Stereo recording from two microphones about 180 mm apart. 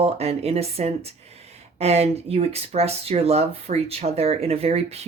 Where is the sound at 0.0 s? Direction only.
35° right (ahead or behind).